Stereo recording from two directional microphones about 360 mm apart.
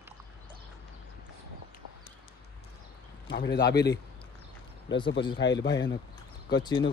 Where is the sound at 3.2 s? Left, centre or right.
Left.